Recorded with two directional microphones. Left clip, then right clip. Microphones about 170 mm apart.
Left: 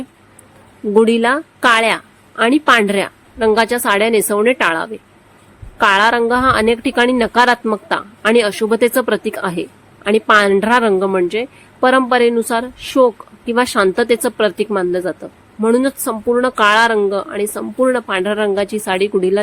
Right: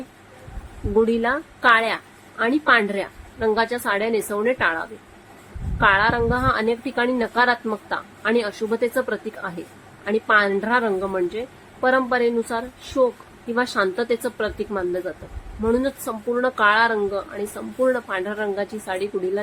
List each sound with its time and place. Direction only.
0.9 s speech: 50° left (ahead or behind)